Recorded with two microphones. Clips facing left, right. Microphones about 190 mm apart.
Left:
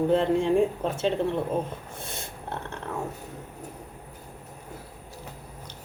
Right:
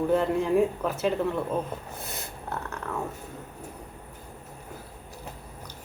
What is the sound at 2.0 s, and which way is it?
Dog, 25° left (ahead or behind).